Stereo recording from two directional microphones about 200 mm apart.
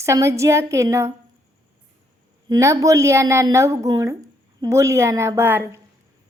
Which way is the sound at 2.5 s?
15° right (ahead or behind).